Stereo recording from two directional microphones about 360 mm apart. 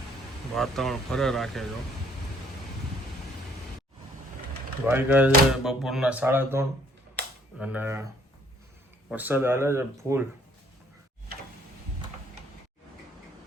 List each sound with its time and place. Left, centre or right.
0.5 s speech: centre
4.9 s speech: centre
7.2 s cap gun: right
7.6 s speech: centre
9.0 s speech: centre